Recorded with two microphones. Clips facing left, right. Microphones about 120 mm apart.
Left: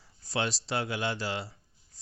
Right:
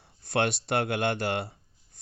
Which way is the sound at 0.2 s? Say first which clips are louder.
Right 5 dB; 60° right (ahead or behind).